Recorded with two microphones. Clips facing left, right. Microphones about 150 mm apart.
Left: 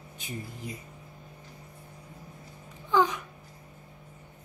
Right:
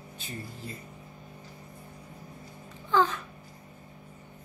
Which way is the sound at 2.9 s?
15° left (ahead or behind).